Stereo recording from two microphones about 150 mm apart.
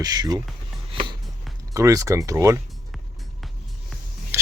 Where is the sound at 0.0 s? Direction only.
25° right (ahead or behind).